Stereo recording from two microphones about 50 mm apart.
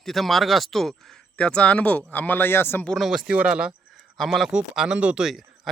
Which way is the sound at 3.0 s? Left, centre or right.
Centre.